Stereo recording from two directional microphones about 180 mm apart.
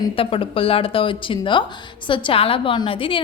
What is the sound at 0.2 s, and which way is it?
A woman's voice, 30° left (ahead or behind).